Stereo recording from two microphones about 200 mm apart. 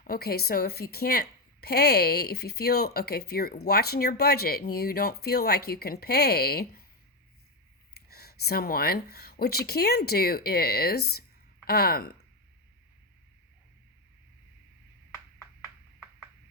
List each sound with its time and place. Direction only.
0.0 s a woman's voice: 50° left (ahead or behind)
7.9 s a woman's voice: 50° left (ahead or behind)